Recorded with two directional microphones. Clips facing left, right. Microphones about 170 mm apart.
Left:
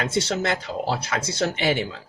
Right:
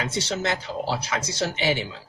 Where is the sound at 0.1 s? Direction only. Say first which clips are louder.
Left 3 dB; 55° left (ahead or behind).